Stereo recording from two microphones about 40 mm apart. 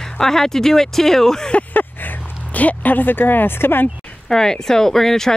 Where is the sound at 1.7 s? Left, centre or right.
Left.